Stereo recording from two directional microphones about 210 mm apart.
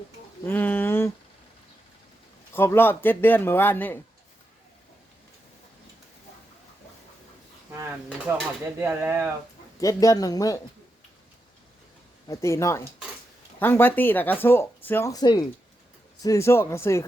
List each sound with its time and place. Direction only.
0.4 s speech: 10° left (ahead or behind)
2.5 s speech: 10° left (ahead or behind)
8.3 s speech: 10° right (ahead or behind)
9.8 s speech: 15° left (ahead or behind)
12.3 s speech: 15° left (ahead or behind)